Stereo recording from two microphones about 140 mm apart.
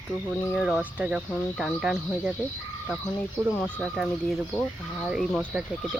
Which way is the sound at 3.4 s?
15° right (ahead or behind).